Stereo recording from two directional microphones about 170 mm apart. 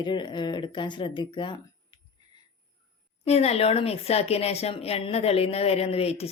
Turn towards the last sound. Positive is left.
turn(degrees=35)  # may be behind; listen again after turning